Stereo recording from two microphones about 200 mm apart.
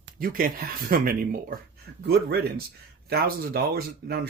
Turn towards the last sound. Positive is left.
turn(degrees=-50)  # may be behind; listen again after turning